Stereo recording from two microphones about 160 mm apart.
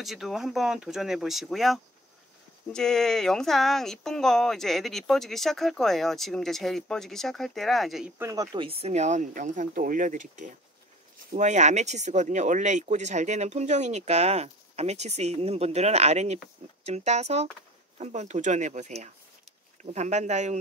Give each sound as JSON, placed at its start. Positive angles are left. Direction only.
{"t": 0.0, "sound": "speech", "side_deg": 0}
{"t": 8.2, "sound": "speech", "side_deg": -20}
{"t": 8.5, "sound": "speech", "side_deg": -35}